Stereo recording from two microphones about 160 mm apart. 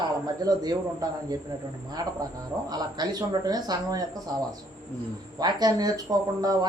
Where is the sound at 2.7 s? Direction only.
25° right (ahead or behind).